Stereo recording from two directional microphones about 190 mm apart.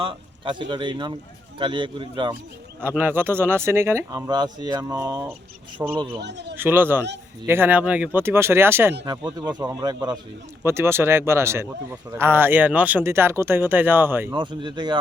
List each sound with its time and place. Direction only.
0.0 s speech: 25° right (ahead or behind)
2.8 s a man's voice: 10° right (ahead or behind); by 6.1 s 25° right (ahead or behind)
6.1 s a man's voice: 65° right (ahead or behind)
6.6 s a man's voice: 10° right (ahead or behind)
14.3 s speech: 25° right (ahead or behind)